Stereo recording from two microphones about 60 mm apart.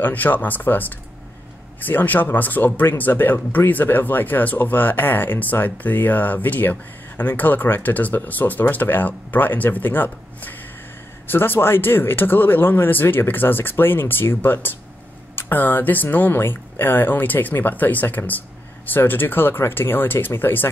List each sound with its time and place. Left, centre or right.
0.0 s speech: left